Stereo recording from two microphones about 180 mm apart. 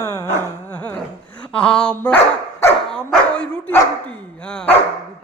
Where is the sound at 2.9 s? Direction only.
5° left (ahead or behind).